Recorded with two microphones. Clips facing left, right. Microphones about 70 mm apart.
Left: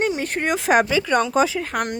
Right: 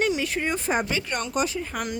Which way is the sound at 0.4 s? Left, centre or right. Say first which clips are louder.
Left 10 dB; left.